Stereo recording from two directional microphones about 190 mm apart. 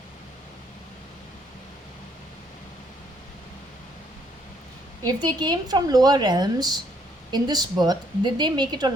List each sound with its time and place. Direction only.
5.0 s a woman's voice: 20° right (ahead or behind)